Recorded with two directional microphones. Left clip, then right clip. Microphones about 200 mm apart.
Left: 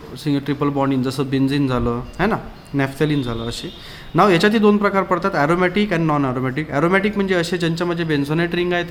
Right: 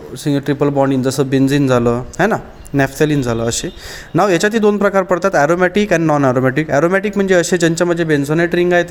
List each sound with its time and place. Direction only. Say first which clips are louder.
0.3 s speech: right 5 dB; 30° right (ahead or behind)